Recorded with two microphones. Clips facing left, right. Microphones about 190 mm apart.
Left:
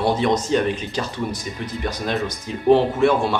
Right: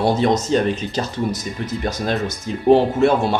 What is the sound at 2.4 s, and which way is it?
Speech, 40° right (ahead or behind).